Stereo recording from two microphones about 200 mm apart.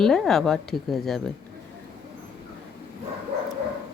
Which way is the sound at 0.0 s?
Centre (ahead or behind).